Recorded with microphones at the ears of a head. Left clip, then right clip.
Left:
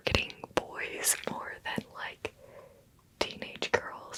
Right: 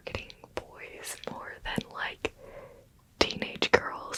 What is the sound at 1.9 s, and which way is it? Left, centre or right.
Whispering, right.